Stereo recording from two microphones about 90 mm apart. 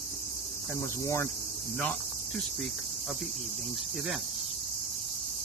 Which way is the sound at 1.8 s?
10° left (ahead or behind).